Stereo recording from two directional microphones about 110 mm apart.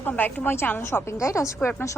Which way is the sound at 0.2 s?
20° left (ahead or behind).